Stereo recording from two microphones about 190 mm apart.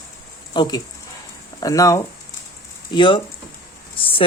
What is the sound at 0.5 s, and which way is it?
Speech, 20° left (ahead or behind).